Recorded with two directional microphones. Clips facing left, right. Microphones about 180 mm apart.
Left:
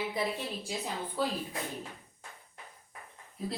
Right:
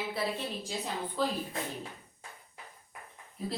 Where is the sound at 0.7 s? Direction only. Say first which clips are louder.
Left 1 dB; centre (ahead or behind).